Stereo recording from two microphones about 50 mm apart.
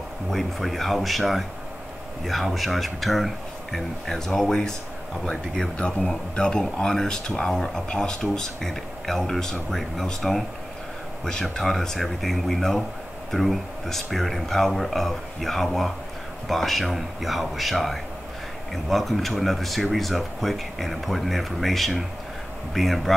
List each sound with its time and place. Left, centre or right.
0.3 s speech: centre
11.5 s speech: centre